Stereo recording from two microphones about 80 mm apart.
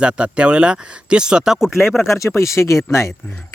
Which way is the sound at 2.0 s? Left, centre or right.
Left.